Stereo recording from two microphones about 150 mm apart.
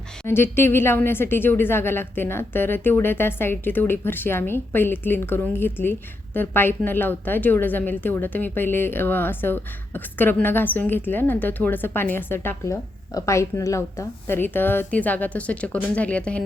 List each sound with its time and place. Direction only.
0.3 s a woman's voice: 15° left (ahead or behind)